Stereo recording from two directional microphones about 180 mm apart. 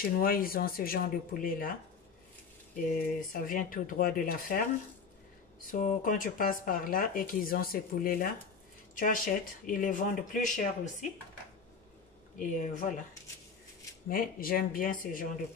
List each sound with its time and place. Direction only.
0.2 s speech: 55° left (ahead or behind)
2.9 s speech: 50° left (ahead or behind)
12.4 s speech: 45° left (ahead or behind)
14.0 s speech: 55° left (ahead or behind)